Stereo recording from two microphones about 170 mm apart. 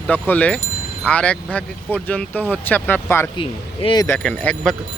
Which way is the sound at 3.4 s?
30° left (ahead or behind).